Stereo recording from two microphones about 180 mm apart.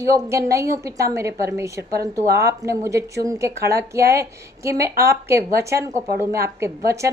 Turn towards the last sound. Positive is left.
turn(degrees=-15)  # may be behind; listen again after turning